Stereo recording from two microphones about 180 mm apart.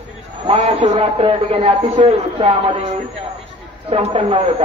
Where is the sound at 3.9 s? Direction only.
35° right (ahead or behind).